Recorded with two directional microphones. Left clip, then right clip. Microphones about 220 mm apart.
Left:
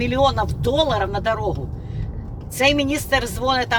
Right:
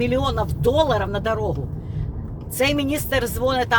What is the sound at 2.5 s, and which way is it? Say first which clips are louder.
Speech: left 3 dB; 20° right (ahead or behind).